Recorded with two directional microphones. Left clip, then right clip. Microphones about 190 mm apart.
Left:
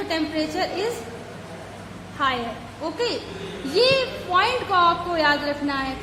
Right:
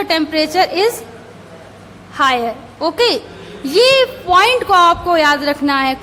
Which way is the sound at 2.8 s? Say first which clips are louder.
Right 12 dB; 50° right (ahead or behind).